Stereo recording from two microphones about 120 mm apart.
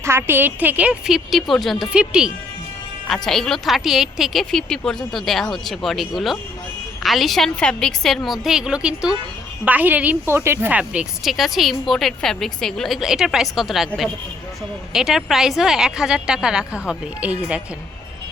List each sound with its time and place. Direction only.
0.0 s a woman's voice: 20° right (ahead or behind); by 1.9 s centre (ahead or behind)
1.9 s a woman's voice: 10° right (ahead or behind)
3.1 s speech: 5° left (ahead or behind)